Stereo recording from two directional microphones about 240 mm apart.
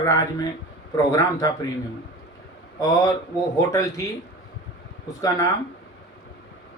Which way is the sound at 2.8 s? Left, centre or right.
Centre.